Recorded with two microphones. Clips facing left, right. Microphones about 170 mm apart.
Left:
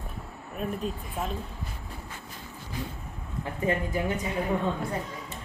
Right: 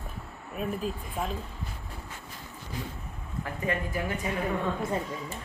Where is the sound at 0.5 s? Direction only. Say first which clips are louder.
Even; 5° right (ahead or behind).